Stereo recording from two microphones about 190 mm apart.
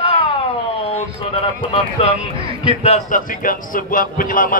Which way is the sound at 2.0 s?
30° left (ahead or behind).